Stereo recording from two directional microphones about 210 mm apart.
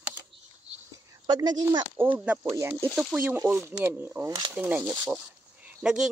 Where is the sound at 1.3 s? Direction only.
20° right (ahead or behind).